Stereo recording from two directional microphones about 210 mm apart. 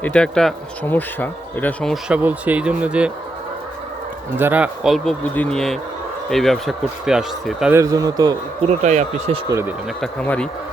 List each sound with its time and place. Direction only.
0.0 s speech: 5° left (ahead or behind)
4.4 s speech: 10° right (ahead or behind)
7.8 s a man's voice: 15° right (ahead or behind)
8.6 s speech: 30° right (ahead or behind)
9.5 s a man's voice: 10° right (ahead or behind)
10.0 s speech: 5° left (ahead or behind)